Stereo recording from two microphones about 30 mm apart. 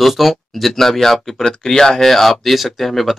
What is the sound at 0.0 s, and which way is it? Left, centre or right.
Speech, centre.